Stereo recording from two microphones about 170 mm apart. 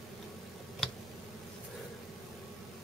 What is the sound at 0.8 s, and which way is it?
Tick, 5° left (ahead or behind).